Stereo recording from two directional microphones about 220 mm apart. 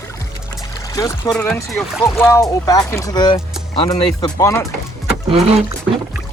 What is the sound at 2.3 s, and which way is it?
Speech, 15° left (ahead or behind).